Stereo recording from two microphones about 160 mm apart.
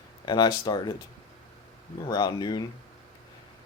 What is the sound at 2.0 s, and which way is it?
Speech, 25° left (ahead or behind).